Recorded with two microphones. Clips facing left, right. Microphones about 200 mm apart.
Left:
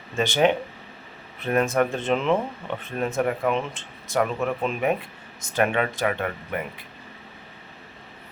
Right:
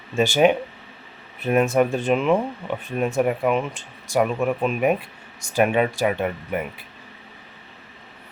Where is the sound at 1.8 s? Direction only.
15° right (ahead or behind).